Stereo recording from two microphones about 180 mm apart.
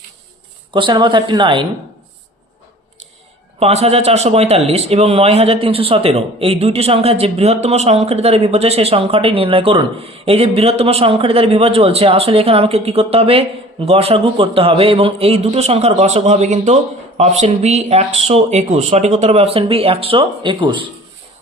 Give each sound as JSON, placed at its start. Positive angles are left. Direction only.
{"t": 0.7, "sound": "a woman's voice", "side_deg": -25}
{"t": 3.6, "sound": "a man's voice", "side_deg": -35}